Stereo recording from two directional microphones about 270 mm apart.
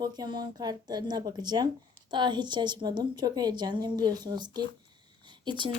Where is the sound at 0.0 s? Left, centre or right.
Centre.